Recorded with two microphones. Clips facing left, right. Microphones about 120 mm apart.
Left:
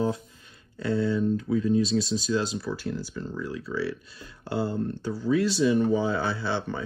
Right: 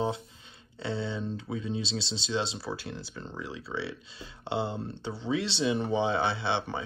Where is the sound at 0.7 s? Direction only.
25° right (ahead or behind).